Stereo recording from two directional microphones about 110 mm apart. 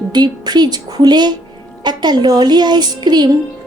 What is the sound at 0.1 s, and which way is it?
A woman's voice, 40° right (ahead or behind).